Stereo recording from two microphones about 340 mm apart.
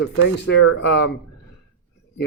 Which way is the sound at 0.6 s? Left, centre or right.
Left.